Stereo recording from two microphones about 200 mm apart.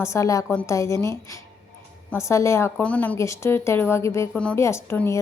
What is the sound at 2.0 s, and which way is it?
A woman's voice, 15° left (ahead or behind).